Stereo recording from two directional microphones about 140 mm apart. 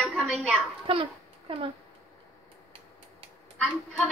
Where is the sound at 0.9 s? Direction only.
40° right (ahead or behind).